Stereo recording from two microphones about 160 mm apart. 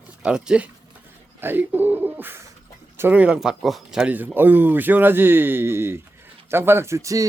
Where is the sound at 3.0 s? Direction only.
10° right (ahead or behind).